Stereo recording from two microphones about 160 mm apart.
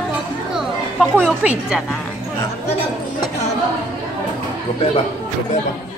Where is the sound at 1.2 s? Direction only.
5° right (ahead or behind).